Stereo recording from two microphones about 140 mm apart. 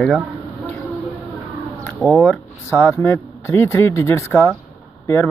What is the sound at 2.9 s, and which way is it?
Speech, 20° left (ahead or behind).